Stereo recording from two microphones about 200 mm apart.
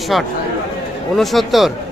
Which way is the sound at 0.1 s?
Centre (ahead or behind).